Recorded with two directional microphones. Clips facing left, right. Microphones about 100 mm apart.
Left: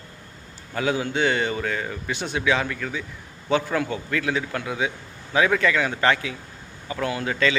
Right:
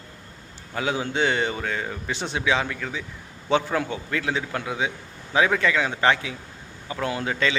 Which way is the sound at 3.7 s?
20° right (ahead or behind).